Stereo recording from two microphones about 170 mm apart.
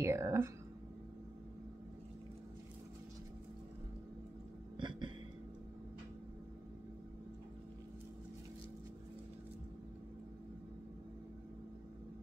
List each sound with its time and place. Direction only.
0.0 s speech: 15° right (ahead or behind)
4.7 s music: 30° right (ahead or behind)